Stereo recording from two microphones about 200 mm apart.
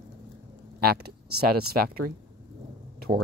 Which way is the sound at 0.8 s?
50° right (ahead or behind).